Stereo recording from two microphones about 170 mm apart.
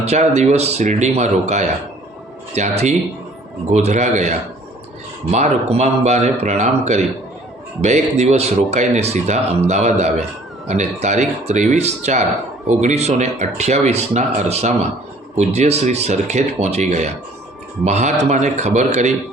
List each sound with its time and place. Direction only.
0.0 s speech: 40° right (ahead or behind)